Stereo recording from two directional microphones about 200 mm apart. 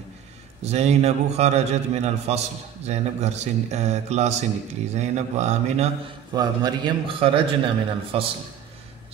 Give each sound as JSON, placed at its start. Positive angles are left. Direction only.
{"t": 0.7, "sound": "a man's voice", "side_deg": -35}
{"t": 6.3, "sound": "a man's voice", "side_deg": -20}